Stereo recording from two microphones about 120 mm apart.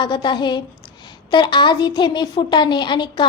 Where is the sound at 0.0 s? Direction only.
40° left (ahead or behind).